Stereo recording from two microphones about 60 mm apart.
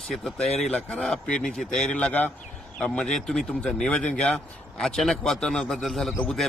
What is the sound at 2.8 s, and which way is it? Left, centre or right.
Speech, centre.